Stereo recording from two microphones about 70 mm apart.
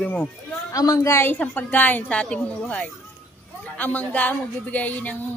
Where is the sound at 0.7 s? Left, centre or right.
Left.